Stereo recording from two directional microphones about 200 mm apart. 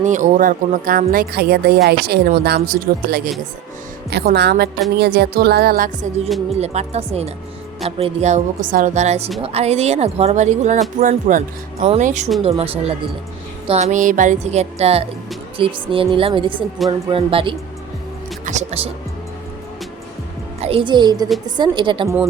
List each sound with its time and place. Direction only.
0.0 s a woman's voice: 40° right (ahead or behind)
20.6 s a woman's voice: 30° right (ahead or behind)
22.0 s speech: centre (ahead or behind)